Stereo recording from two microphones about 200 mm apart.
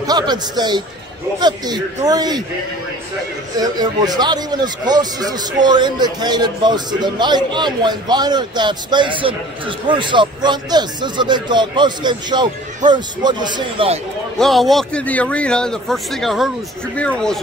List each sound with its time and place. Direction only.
0.0 s a man's voice: 20° right (ahead or behind)
2.0 s speech: 20° right (ahead or behind)
3.5 s speech: 20° right (ahead or behind)
14.4 s a man's voice: centre (ahead or behind)